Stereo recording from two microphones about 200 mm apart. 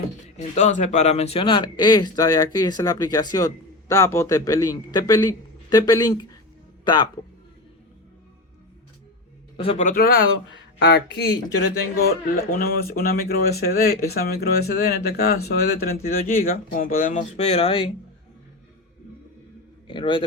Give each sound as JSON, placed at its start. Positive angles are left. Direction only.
{"t": 0.3, "sound": "speech", "side_deg": 35}
{"t": 9.6, "sound": "a man's voice", "side_deg": 30}
{"t": 19.9, "sound": "speech", "side_deg": 25}